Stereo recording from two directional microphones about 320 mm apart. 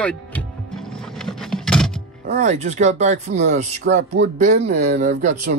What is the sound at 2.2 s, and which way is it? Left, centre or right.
Speech, right.